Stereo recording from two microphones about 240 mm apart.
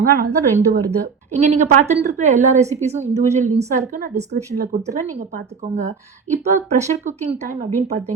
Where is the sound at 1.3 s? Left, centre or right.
Right.